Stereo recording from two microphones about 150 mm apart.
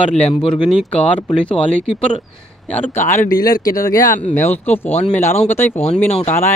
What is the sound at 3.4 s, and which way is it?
Speech, 70° left (ahead or behind).